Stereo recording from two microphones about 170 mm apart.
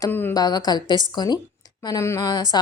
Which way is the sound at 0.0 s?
10° left (ahead or behind).